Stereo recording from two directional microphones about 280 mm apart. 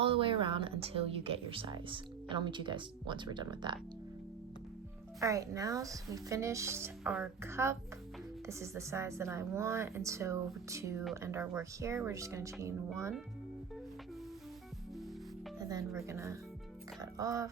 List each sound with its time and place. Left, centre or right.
0.0 s speech: centre
5.2 s speech: centre
15.5 s speech: centre